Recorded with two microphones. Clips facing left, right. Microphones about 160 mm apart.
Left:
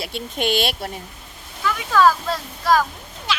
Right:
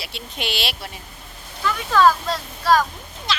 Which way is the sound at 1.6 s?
5° left (ahead or behind).